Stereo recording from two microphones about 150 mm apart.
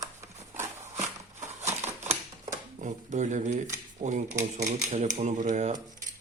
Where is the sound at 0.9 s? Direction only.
50° right (ahead or behind).